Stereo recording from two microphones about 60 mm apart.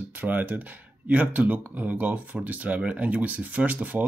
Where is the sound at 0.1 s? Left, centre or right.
Right.